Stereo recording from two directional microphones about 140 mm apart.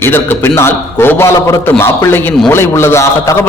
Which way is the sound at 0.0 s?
15° left (ahead or behind).